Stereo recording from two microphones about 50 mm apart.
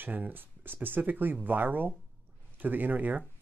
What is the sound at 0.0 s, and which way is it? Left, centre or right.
Speech, right.